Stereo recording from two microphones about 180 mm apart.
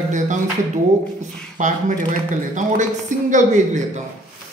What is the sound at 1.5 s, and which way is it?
Speech, 45° right (ahead or behind).